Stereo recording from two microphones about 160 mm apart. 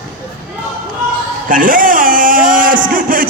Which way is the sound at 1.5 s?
55° right (ahead or behind).